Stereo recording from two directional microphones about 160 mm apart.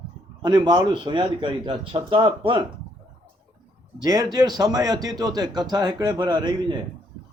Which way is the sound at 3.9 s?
25° right (ahead or behind).